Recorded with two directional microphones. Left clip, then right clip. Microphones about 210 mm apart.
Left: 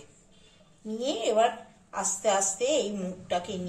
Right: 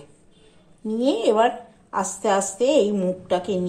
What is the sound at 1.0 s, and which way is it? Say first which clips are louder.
A woman's voice: right 6 dB; 45° right (ahead or behind).